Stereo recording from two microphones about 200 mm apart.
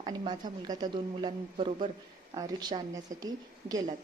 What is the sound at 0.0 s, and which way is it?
A woman's voice, 20° right (ahead or behind).